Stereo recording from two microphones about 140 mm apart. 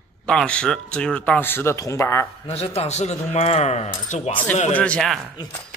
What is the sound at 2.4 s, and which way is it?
A man's voice, 45° left (ahead or behind).